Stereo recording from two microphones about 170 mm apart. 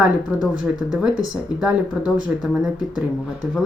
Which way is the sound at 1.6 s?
5° right (ahead or behind).